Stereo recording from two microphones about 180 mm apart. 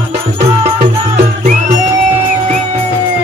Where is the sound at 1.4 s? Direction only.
40° right (ahead or behind).